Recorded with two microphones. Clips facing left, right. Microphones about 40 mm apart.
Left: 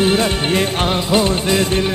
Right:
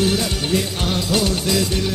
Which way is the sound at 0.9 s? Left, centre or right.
Left.